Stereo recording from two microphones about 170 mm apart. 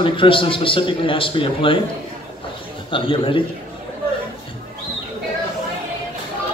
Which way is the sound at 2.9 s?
30° left (ahead or behind).